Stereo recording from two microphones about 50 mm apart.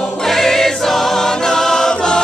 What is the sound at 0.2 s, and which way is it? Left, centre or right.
Choir, centre.